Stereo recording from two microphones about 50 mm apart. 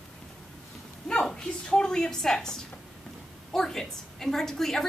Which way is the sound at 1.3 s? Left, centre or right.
Centre.